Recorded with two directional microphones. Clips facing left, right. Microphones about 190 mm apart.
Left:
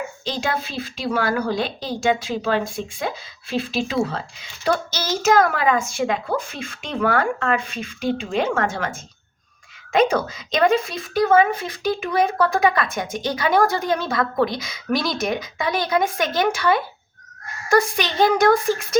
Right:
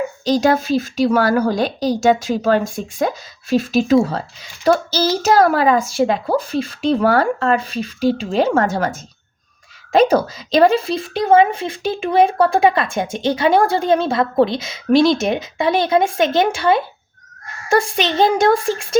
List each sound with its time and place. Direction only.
0.3 s speech: 40° right (ahead or behind)